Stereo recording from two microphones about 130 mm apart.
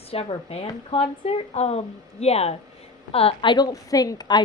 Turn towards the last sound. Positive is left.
turn(degrees=35)  # may be behind; listen again after turning